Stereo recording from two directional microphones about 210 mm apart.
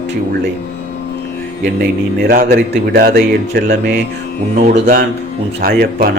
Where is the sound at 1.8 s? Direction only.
45° right (ahead or behind).